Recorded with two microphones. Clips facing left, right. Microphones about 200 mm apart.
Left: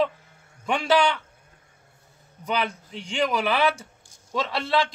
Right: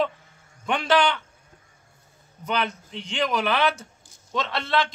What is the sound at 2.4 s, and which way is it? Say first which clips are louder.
A man's voice: even; 10° left (ahead or behind).